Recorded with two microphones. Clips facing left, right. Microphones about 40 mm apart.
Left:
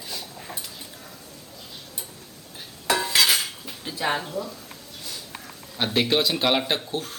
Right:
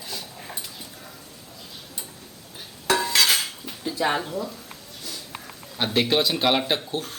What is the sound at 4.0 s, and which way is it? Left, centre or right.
Speech, centre.